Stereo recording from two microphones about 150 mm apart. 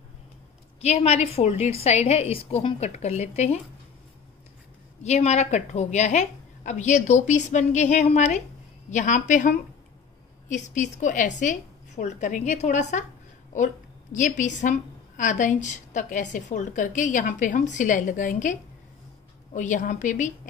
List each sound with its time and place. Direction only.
0.7 s a woman's voice: 45° left (ahead or behind)
5.0 s a woman's voice: 50° left (ahead or behind)
14.1 s a woman's voice: 55° left (ahead or behind)